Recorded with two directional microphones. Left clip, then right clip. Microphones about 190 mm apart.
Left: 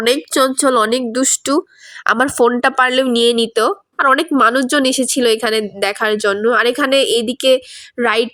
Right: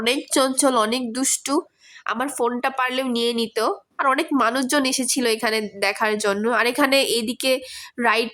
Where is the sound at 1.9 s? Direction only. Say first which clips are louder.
Left 11 dB; 30° left (ahead or behind).